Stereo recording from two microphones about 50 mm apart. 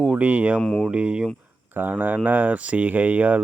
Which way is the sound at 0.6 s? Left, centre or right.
Centre.